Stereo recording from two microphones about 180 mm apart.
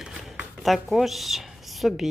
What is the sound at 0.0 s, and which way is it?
Speech, centre (ahead or behind).